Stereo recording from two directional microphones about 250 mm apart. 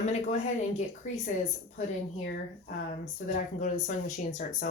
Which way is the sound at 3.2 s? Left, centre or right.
Left.